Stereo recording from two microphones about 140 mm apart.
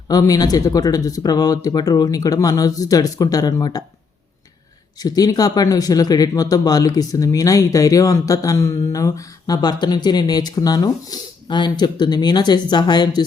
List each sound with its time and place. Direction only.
0.1 s speech: 25° left (ahead or behind)
4.9 s a woman's voice: 25° left (ahead or behind)